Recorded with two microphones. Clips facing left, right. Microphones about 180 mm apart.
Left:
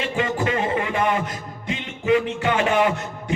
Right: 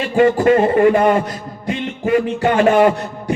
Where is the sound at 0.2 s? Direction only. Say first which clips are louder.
Right 12 dB; 50° right (ahead or behind).